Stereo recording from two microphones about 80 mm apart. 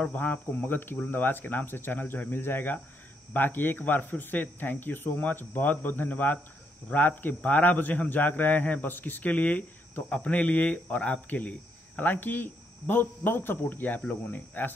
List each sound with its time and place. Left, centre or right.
0.0 s speech: centre